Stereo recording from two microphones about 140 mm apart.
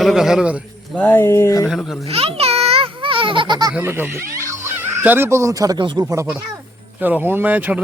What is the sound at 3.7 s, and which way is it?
Speech, 15° right (ahead or behind).